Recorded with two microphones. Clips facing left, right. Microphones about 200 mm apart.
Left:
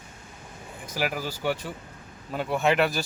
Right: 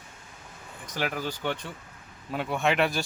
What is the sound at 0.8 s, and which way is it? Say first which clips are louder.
Speech: left 1 dB; 10° left (ahead or behind).